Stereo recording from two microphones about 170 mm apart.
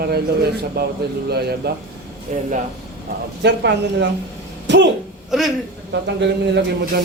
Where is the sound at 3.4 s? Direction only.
90° right.